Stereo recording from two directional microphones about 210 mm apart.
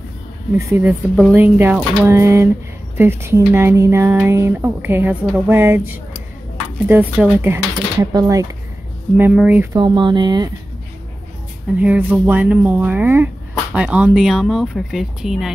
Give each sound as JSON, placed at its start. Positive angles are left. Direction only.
{"t": 0.6, "sound": "speech", "side_deg": -10}
{"t": 9.1, "sound": "speech", "side_deg": -5}
{"t": 9.8, "sound": "speech", "side_deg": -20}
{"t": 11.8, "sound": "speech", "side_deg": -5}